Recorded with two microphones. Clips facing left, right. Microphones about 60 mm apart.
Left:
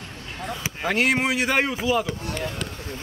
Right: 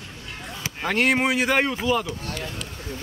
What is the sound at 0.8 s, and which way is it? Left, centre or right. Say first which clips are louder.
Speech: right 1 dB; centre.